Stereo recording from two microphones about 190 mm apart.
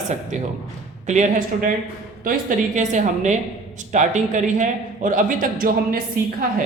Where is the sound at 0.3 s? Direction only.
40° right (ahead or behind).